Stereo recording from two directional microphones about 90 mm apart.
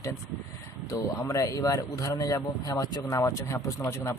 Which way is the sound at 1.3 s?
40° left (ahead or behind).